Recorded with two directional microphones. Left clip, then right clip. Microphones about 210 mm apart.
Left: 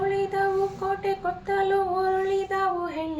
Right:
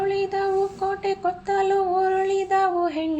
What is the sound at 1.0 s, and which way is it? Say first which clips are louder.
Female singing: right 3 dB; 40° right (ahead or behind).